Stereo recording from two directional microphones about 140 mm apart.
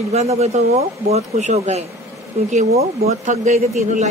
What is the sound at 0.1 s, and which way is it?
A man's voice, 50° right (ahead or behind).